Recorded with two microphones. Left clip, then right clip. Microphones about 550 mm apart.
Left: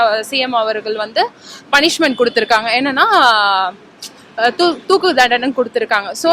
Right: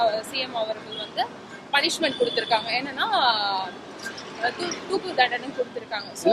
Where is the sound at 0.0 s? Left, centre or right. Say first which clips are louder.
Left 10 dB; left.